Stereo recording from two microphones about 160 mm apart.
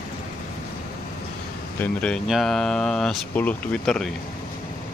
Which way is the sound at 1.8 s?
5° left (ahead or behind).